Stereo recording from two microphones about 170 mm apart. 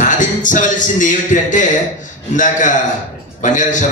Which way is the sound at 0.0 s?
45° left (ahead or behind).